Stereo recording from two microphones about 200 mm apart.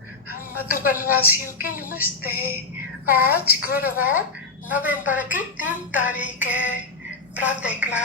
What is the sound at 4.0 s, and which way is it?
A woman's voice, 10° right (ahead or behind).